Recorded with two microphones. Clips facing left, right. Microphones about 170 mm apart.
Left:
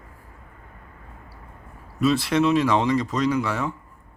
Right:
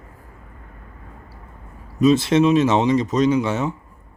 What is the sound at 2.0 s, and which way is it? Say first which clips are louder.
Speech: right 5 dB; 20° right (ahead or behind).